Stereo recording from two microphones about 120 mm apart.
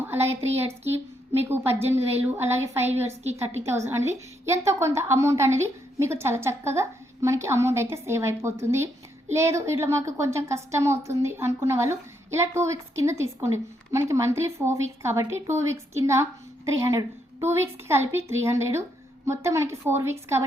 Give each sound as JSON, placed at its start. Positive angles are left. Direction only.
{"t": 0.1, "sound": "a woman's voice", "side_deg": -20}
{"t": 2.8, "sound": "a woman's voice", "side_deg": -65}
{"t": 3.3, "sound": "a woman's voice", "side_deg": -25}